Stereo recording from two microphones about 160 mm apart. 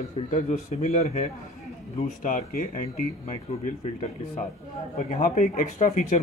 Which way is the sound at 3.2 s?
40° left (ahead or behind).